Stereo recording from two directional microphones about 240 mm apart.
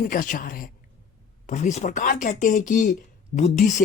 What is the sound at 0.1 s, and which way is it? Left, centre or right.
Speech, left.